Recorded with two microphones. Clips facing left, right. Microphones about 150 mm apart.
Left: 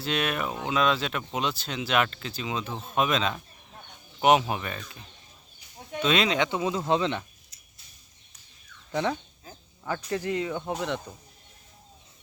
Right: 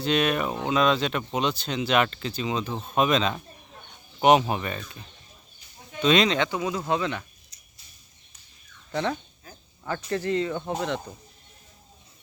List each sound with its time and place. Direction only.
0.0 s speech: centre (ahead or behind)
6.5 s speech: 25° left (ahead or behind)
8.9 s a sound: 15° left (ahead or behind)
9.8 s speech: 10° left (ahead or behind)